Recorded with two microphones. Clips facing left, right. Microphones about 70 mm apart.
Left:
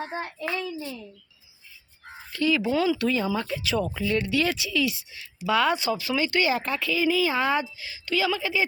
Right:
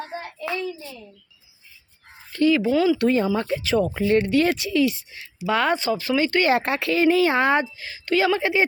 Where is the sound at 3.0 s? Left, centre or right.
Right.